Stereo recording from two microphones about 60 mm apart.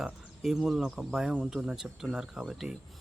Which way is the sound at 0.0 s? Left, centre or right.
Centre.